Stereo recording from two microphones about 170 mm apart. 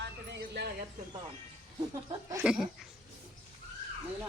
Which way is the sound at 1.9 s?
20° right (ahead or behind).